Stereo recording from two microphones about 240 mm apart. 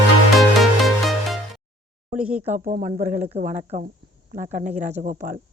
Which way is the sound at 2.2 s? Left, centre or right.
Centre.